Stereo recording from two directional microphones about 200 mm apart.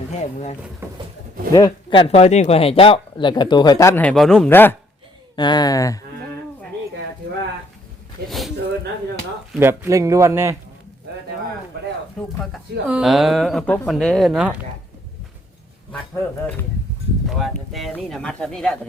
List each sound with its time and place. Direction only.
0.1 s speech: 35° left (ahead or behind)
1.5 s speech: 20° left (ahead or behind)
5.4 s speech: 20° left (ahead or behind)
8.3 s a sound: centre (ahead or behind)
9.5 s speech: 10° right (ahead or behind)
12.9 s speech: centre (ahead or behind)
15.9 s speech: 10° left (ahead or behind)